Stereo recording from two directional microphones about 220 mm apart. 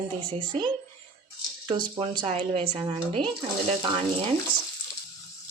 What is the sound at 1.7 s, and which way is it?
Speech, 25° right (ahead or behind).